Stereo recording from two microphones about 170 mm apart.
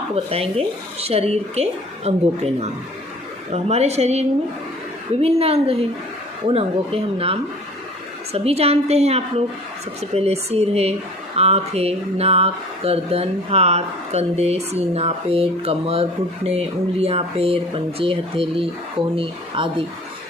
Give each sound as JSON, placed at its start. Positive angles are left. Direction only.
{"t": 0.3, "sound": "speech", "side_deg": -35}